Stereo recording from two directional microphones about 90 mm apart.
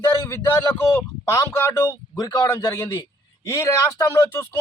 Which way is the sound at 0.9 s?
30° left (ahead or behind).